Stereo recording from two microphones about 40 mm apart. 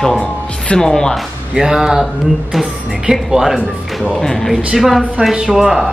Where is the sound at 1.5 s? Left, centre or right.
Centre.